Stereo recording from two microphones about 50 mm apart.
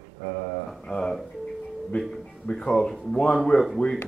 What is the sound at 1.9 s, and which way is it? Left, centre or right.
Speech, left.